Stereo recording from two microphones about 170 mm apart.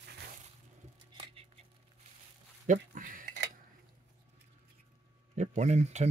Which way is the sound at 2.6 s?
50° right (ahead or behind).